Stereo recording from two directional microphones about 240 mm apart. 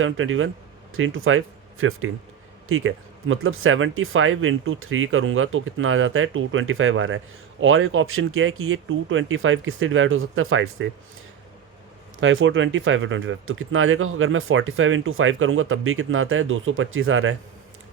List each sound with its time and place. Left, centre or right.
0.0 s speech: right
12.2 s speech: right